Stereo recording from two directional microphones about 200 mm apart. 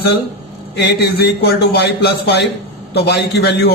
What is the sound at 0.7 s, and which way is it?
A man's voice, 55° left (ahead or behind).